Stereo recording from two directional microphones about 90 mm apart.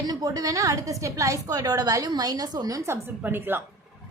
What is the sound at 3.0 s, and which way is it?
Speech, 25° right (ahead or behind).